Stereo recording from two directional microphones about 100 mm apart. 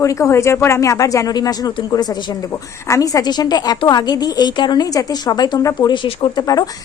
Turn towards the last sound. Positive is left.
turn(degrees=40)  # may be behind; listen again after turning